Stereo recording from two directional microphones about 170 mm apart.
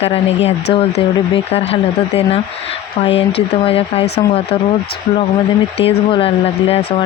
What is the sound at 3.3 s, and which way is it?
Speech, 35° left (ahead or behind).